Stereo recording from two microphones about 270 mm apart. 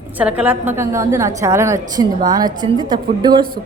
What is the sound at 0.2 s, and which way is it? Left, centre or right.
A woman's voice, centre.